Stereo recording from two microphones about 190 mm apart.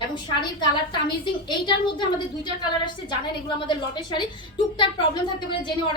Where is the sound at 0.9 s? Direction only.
25° left (ahead or behind).